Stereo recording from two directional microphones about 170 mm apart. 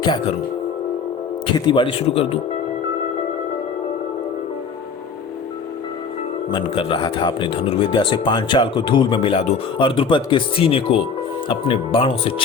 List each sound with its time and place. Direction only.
0.0 s speech: 25° left (ahead or behind)
1.5 s speech: 25° left (ahead or behind)
6.5 s speech: 30° left (ahead or behind)